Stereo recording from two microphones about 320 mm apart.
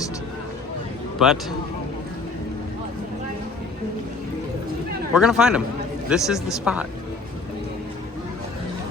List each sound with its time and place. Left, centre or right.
1.2 s speech: centre
5.1 s speech: centre